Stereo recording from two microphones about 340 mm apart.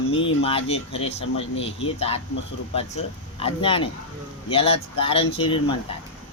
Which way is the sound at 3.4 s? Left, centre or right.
Centre.